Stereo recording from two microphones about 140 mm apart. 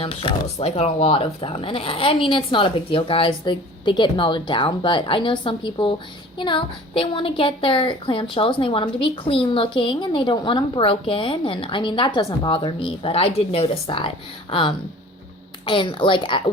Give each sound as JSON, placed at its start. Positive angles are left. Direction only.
{"t": 0.0, "sound": "a woman's voice", "side_deg": 45}